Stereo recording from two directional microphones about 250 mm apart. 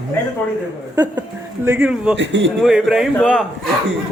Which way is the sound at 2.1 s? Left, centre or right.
Right.